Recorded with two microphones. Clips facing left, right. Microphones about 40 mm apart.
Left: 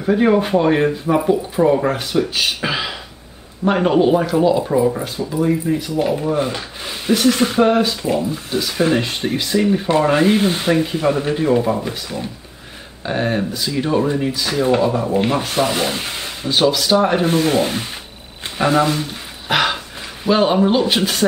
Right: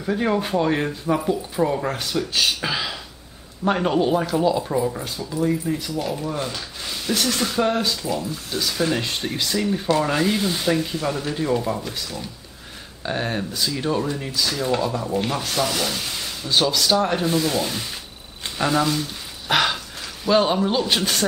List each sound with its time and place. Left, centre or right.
0.0 s speech: centre
13.0 s speech: centre; by 16.3 s left
16.4 s speech: centre
17.2 s speech: left
19.5 s a sound: centre
20.2 s speech: centre
21.0 s speech: centre